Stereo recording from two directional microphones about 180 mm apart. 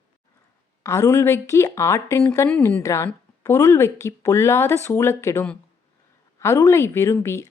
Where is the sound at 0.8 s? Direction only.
15° left (ahead or behind).